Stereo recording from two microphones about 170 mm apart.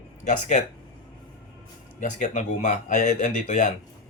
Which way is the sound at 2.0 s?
45° left (ahead or behind).